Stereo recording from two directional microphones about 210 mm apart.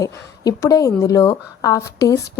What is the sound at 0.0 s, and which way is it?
A woman's voice, 15° left (ahead or behind).